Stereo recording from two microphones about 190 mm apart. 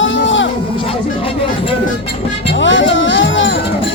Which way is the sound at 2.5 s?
75° left (ahead or behind).